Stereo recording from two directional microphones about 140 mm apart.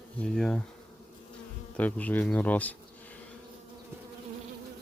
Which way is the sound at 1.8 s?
10° left (ahead or behind).